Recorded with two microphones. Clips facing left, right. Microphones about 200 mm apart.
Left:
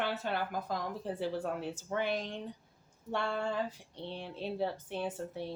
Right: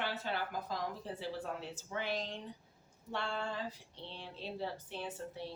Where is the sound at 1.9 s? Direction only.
55° left (ahead or behind).